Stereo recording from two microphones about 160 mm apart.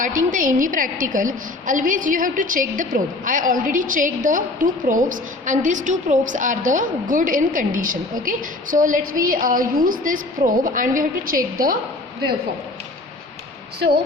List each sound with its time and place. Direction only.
0.0 s a woman's voice: 55° right (ahead or behind)
13.7 s speech: 90° right